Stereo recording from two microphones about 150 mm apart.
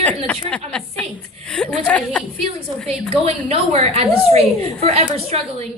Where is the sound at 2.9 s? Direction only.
40° right (ahead or behind).